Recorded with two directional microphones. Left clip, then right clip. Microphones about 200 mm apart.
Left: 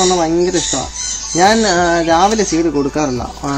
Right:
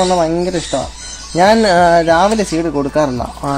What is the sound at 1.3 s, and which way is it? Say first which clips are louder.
Speech: right 2 dB; 40° right (ahead or behind).